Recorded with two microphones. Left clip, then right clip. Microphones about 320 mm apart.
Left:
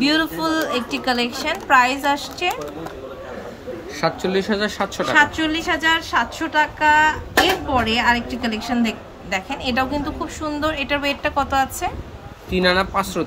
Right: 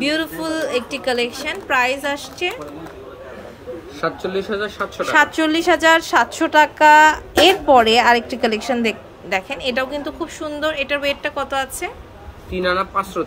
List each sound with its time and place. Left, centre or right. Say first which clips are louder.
0.0 s a woman's voice: left 2 dB; centre
4.6 s speech: left 1 dB; left
5.0 s a woman's voice: right 2 dB; centre
12.6 s a man's voice: left 1 dB; left